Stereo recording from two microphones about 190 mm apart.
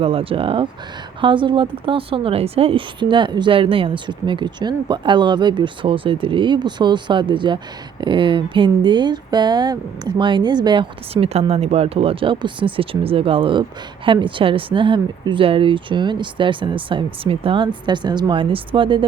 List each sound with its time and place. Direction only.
0.0 s speech: 30° right (ahead or behind)